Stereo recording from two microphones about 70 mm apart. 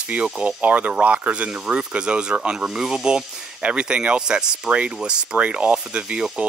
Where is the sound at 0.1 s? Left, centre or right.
Centre.